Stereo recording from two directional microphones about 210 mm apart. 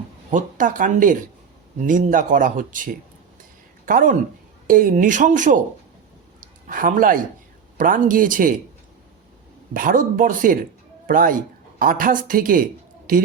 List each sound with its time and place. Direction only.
0.3 s speech: 40° right (ahead or behind)
6.4 s a sound: 40° right (ahead or behind)
7.8 s speech: 40° right (ahead or behind)
9.7 s speech: 40° right (ahead or behind)